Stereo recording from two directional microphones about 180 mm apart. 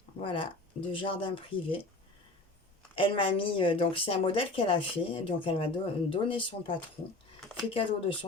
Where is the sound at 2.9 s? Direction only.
30° left (ahead or behind).